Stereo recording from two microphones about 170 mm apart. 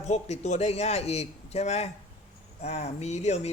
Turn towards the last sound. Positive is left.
turn(degrees=40)  # may be behind; listen again after turning